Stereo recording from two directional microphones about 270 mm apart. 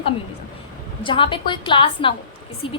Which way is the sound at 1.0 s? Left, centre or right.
Centre.